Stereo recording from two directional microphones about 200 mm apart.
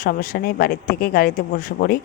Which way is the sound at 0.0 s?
45° left (ahead or behind).